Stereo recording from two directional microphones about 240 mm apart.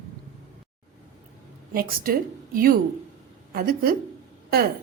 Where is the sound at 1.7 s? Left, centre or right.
Right.